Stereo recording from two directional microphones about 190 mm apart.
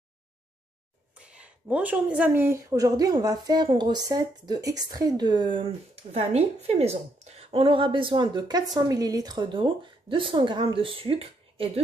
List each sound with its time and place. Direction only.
1.1 s speech: 5° right (ahead or behind); by 11.8 s 30° right (ahead or behind)